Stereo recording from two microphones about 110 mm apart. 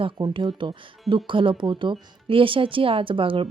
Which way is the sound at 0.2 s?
45° right (ahead or behind).